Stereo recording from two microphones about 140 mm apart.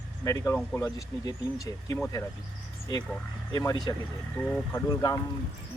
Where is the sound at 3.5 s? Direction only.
30° left (ahead or behind).